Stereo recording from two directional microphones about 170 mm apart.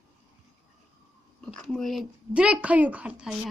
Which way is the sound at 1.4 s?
5° left (ahead or behind).